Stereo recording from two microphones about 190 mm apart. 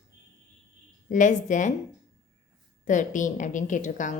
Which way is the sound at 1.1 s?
40° left (ahead or behind).